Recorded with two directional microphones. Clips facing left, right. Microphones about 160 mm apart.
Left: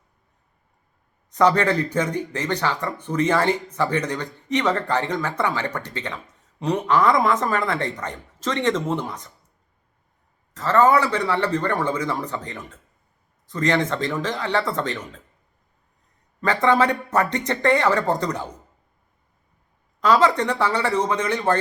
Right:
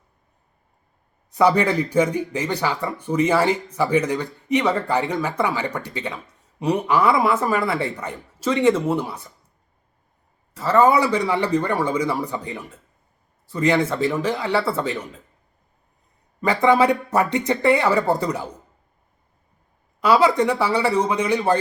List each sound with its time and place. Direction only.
1.3 s speech: 10° right (ahead or behind)
10.5 s speech: 10° right (ahead or behind)
16.4 s speech: 10° right (ahead or behind)
20.0 s speech: 10° right (ahead or behind)